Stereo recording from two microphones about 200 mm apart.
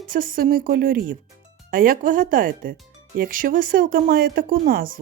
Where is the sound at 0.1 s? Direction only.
45° right (ahead or behind).